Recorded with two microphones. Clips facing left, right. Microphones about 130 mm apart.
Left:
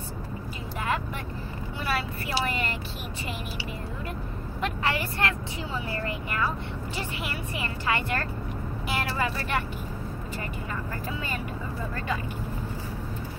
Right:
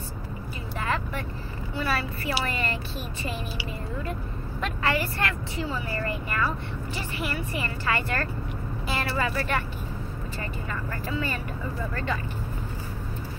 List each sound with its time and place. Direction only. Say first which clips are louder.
0.8 s vehicle: even; 15° left (ahead or behind)
2.4 s a woman's voice: even; 15° left (ahead or behind)
4.6 s a woman's voice: right 2 dB; 20° left (ahead or behind)
8.8 s vehicle: right 1 dB; 15° left (ahead or behind)